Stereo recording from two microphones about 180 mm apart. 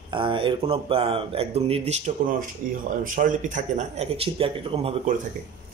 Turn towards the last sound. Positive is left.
turn(degrees=-35)  # may be behind; listen again after turning